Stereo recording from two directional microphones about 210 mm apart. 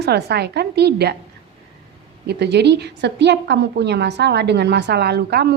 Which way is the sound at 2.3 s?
55° right (ahead or behind).